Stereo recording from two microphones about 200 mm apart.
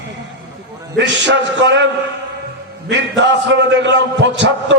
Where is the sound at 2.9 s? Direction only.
60° right (ahead or behind).